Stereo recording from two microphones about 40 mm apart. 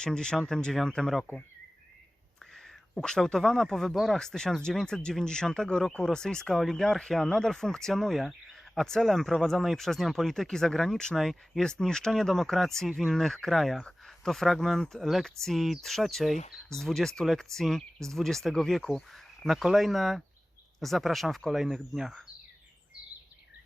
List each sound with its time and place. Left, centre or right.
0.0 s speech: centre
2.6 s a sound: centre
3.3 s speech: centre
11.1 s speech: centre
11.6 s speech: centre
12.9 s speech: centre
13.1 s speech: centre
13.5 s speech: centre
21.6 s speech: centre